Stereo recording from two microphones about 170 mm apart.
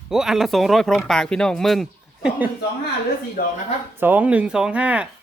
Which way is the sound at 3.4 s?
60° left (ahead or behind).